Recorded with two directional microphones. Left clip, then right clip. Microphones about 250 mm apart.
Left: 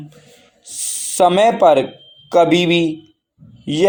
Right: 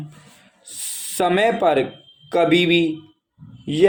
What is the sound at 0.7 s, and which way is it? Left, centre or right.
A man's voice, centre.